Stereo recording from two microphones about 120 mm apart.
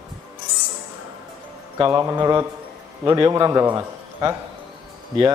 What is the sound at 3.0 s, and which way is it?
A man's voice, 30° right (ahead or behind).